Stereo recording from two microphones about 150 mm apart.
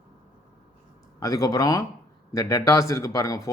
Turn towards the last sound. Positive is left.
turn(degrees=20)  # may be behind; listen again after turning